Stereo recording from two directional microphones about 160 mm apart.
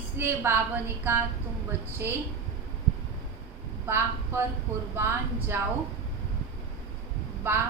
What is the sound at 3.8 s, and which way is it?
A woman's voice, 15° right (ahead or behind).